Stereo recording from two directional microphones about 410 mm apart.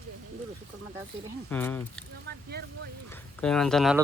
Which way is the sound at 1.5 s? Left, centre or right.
Centre.